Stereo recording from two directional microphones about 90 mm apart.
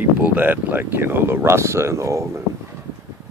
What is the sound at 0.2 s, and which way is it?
Speech, 20° right (ahead or behind).